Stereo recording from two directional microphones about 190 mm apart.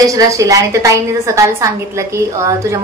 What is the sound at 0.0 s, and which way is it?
A woman's voice, 15° right (ahead or behind).